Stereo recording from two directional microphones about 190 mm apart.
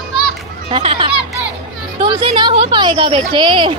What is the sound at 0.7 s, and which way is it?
A woman's voice, 25° right (ahead or behind).